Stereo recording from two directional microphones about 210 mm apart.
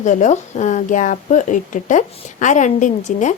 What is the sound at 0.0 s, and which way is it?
Speech, 35° left (ahead or behind).